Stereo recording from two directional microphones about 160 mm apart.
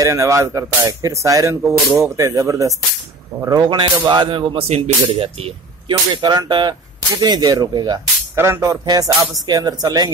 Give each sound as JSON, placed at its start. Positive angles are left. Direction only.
{"t": 0.0, "sound": "speech", "side_deg": -20}